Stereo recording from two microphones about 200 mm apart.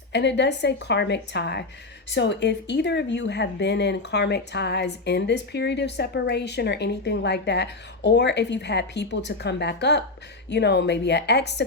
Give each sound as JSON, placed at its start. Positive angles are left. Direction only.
{"t": 0.1, "sound": "speech", "side_deg": 60}